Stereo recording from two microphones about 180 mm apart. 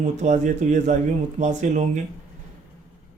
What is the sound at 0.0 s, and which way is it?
A man's voice, 40° right (ahead or behind).